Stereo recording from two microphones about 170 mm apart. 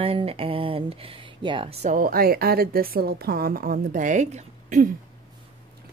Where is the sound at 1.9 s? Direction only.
60° right (ahead or behind).